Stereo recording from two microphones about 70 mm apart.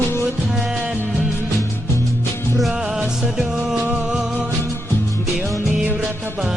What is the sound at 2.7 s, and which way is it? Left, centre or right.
Music, centre.